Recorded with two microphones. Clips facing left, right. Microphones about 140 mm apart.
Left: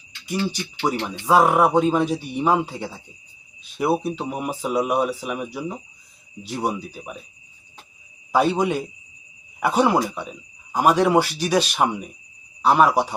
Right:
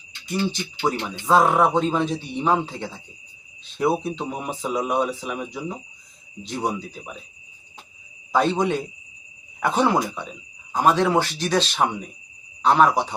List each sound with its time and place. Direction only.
0.4 s speech: 10° left (ahead or behind)
8.3 s speech: 10° left (ahead or behind)